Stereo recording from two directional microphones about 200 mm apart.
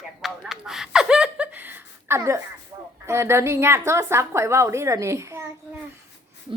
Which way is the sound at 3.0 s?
15° right (ahead or behind).